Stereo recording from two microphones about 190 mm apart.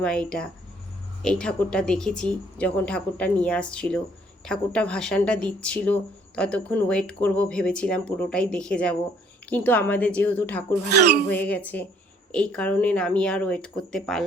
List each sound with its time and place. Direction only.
0.0 s a woman's voice: 5° left (ahead or behind)
10.8 s speech: 60° right (ahead or behind)
11.3 s a woman's voice: 10° left (ahead or behind)